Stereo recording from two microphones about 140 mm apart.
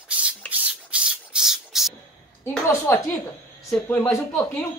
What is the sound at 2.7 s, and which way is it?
Speech, 15° left (ahead or behind).